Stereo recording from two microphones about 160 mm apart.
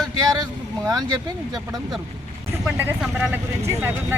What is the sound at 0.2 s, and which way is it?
Speech, 25° right (ahead or behind).